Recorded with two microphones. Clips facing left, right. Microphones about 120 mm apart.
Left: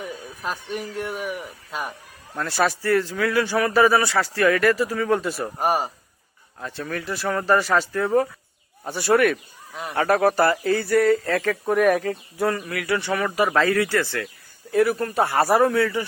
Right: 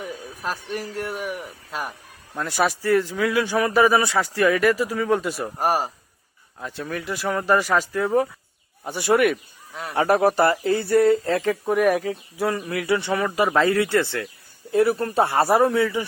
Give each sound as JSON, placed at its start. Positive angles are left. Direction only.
{"t": 0.0, "sound": "a man's voice", "side_deg": 0}
{"t": 5.5, "sound": "a man's voice", "side_deg": 0}
{"t": 11.7, "sound": "speech", "side_deg": -5}
{"t": 12.5, "sound": "speech", "side_deg": -20}